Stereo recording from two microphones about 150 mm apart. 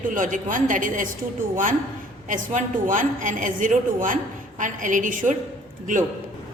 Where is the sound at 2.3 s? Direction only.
60° right (ahead or behind).